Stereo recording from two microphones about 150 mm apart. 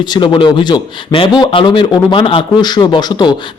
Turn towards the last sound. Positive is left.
turn(degrees=30)  # may be behind; listen again after turning